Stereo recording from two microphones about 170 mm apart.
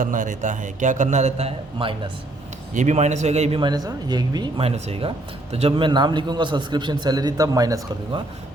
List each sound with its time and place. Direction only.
0.0 s a man's voice: 50° right (ahead or behind)
3.6 s speech: 25° right (ahead or behind)